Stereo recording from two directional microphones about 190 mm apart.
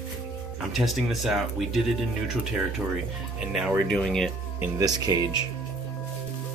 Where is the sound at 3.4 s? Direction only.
Centre (ahead or behind).